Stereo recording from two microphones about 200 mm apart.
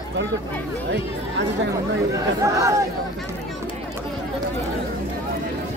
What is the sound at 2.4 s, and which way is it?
Speech, 15° right (ahead or behind).